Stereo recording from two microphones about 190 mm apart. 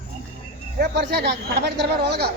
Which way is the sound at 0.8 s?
60° right (ahead or behind).